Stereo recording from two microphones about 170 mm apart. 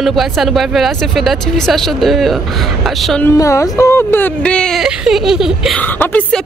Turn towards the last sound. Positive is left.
turn(degrees=10)  # may be behind; listen again after turning